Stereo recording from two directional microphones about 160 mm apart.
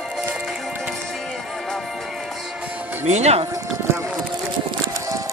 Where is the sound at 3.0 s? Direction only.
45° right (ahead or behind).